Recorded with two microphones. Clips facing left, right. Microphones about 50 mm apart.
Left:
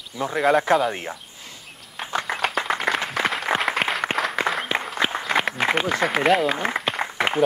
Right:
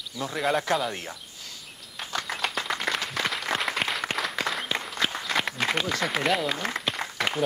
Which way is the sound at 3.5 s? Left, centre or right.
Centre.